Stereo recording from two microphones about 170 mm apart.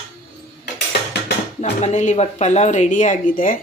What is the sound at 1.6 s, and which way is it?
Speech, 45° left (ahead or behind).